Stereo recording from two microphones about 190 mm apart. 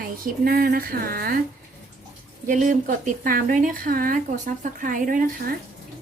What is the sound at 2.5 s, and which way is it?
Speech, 45° right (ahead or behind).